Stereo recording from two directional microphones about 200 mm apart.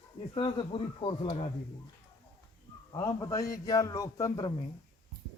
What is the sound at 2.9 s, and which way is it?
A man's voice, 20° left (ahead or behind).